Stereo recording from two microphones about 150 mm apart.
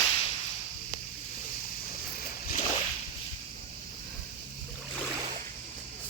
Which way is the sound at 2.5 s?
45° left (ahead or behind).